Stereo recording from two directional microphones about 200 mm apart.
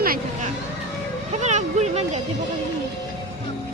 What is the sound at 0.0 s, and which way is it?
Music, 45° right (ahead or behind).